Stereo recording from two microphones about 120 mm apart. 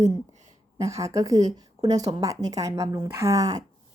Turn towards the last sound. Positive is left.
turn(degrees=-30)  # may be behind; listen again after turning